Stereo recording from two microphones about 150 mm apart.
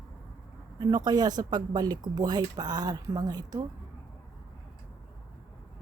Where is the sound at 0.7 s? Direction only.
25° right (ahead or behind).